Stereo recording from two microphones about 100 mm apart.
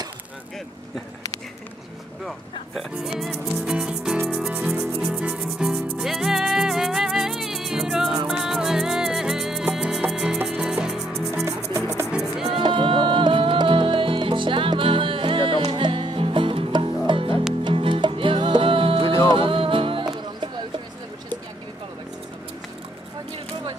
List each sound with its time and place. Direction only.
2.2 s speech: centre (ahead or behind)
4.3 s music: 10° right (ahead or behind)
11.4 s music: 30° right (ahead or behind)
12.1 s music: 5° right (ahead or behind)
12.4 s music: 60° right (ahead or behind)